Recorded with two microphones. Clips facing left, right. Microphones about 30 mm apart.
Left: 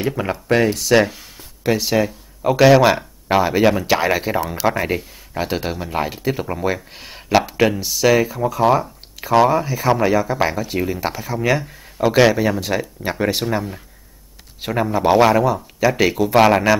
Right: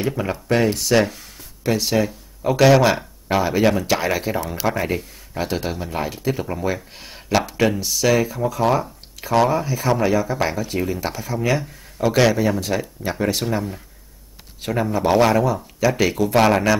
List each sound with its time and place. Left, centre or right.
0.6 s speech: centre